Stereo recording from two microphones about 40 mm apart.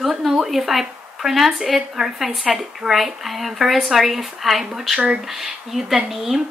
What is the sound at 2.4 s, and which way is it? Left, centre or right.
Speech, right.